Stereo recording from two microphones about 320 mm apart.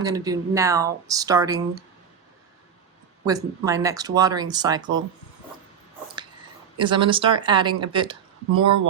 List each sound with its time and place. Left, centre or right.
0.0 s speech: centre
3.2 s speech: centre
6.7 s speech: centre
8.6 s speech: right